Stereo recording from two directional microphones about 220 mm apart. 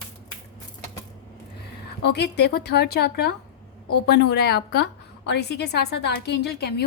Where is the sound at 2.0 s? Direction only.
50° left (ahead or behind).